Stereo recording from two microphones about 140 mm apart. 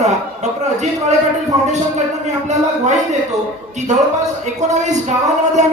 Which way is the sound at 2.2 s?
55° right (ahead or behind).